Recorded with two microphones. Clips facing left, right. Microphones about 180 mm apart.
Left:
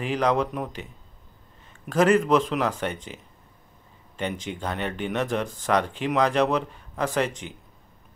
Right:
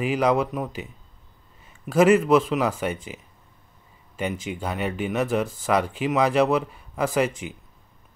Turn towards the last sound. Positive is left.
turn(degrees=-10)  # may be behind; listen again after turning